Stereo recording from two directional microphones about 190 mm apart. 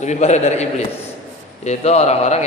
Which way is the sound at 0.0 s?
35° left (ahead or behind).